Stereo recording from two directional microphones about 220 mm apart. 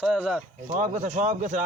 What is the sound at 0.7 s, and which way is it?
Speech, 35° right (ahead or behind).